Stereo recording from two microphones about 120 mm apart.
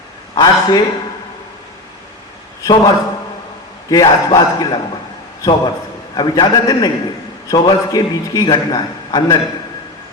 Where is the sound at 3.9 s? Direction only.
35° left (ahead or behind).